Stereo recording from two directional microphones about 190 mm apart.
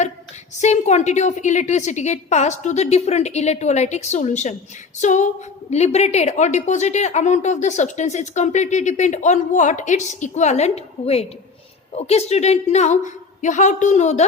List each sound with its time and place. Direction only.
0.6 s a woman's voice: 35° left (ahead or behind)